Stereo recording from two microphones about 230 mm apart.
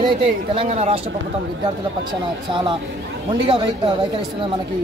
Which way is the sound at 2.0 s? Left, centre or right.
Right.